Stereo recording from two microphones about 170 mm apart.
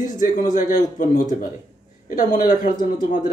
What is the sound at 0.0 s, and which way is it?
Speech, 50° left (ahead or behind).